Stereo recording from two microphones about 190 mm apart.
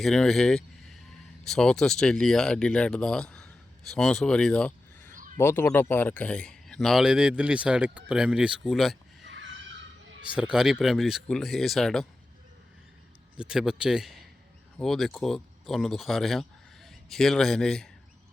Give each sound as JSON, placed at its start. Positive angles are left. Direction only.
{"t": 0.0, "sound": "speech", "side_deg": 5}
{"t": 5.1, "sound": "a sound", "side_deg": -45}
{"t": 5.4, "sound": "speech", "side_deg": 10}
{"t": 9.3, "sound": "a sound", "side_deg": -75}
{"t": 10.3, "sound": "speech", "side_deg": -5}
{"t": 13.3, "sound": "speech", "side_deg": -5}